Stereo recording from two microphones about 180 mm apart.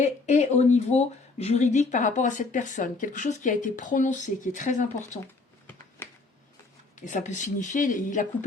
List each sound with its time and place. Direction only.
0.0 s speech: 40° left (ahead or behind)
7.0 s speech: 45° left (ahead or behind)